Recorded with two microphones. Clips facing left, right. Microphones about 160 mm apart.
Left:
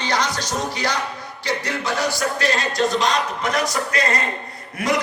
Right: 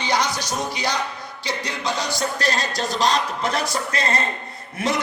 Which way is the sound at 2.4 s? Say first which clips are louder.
Left 3 dB; 40° right (ahead or behind).